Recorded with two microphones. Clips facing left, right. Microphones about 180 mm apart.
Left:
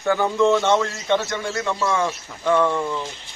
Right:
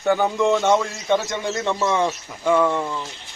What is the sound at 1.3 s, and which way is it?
Speech, 20° right (ahead or behind).